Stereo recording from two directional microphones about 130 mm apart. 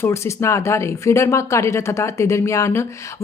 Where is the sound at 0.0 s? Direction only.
20° left (ahead or behind).